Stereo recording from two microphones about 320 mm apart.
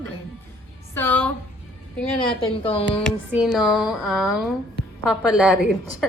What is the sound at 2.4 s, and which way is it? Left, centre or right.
Speech, centre.